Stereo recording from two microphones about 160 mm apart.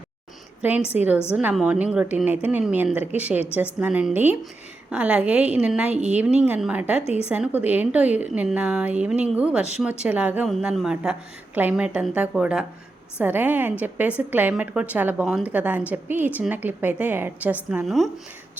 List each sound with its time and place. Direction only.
0.6 s a woman's voice: 10° right (ahead or behind)
7.0 s a woman's voice: 40° left (ahead or behind)
7.3 s a woman's voice: 10° right (ahead or behind)